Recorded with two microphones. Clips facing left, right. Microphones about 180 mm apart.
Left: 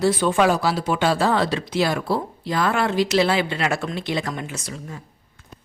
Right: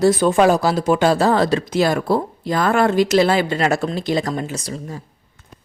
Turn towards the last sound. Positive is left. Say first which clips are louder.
# right 5 dB
turn(degrees=-35)  # may be behind; listen again after turning